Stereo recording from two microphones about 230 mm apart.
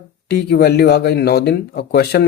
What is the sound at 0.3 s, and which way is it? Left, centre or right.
Speech, left.